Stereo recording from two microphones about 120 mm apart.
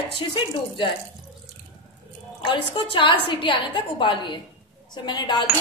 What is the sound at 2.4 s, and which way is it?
A woman's voice, 45° left (ahead or behind).